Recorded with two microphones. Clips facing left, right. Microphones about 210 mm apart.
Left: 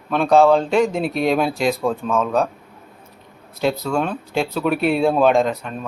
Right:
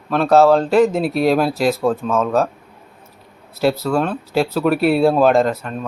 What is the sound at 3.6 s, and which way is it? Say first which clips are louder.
Speech: right 3 dB; 5° right (ahead or behind).